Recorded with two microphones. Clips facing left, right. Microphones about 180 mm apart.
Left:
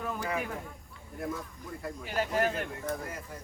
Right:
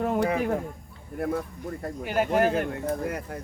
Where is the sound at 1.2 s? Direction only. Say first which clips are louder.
Right 8 dB; 60° right (ahead or behind).